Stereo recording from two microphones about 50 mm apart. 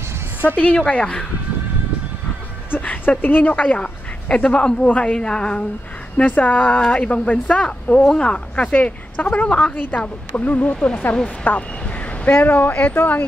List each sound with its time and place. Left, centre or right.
0.7 s speech: left
2.8 s speech: left
5.1 s a woman's voice: centre
6.1 s speech: left
6.8 s speech: left
9.8 s speech: left
12.3 s speech: left